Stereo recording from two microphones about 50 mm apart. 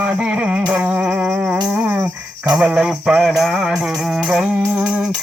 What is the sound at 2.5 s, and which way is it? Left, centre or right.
Music, centre.